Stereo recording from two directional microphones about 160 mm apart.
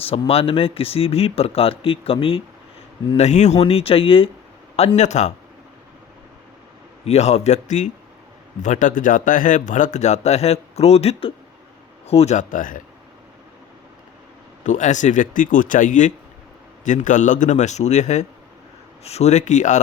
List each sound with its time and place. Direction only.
0.0 s speech: 35° left (ahead or behind)
7.0 s speech: 45° left (ahead or behind)
14.6 s speech: 50° left (ahead or behind)